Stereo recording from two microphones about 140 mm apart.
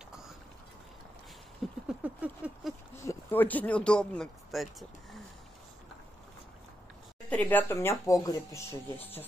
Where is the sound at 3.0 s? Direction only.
10° left (ahead or behind).